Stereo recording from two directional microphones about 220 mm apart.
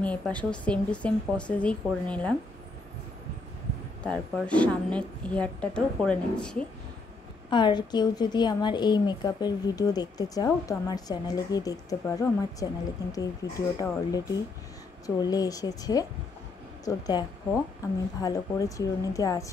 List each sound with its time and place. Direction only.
0.0 s a woman's voice: 5° left (ahead or behind)
4.0 s a woman's voice: 5° left (ahead or behind)
7.4 s a woman's voice: 20° left (ahead or behind)
18.2 s speech: 15° left (ahead or behind)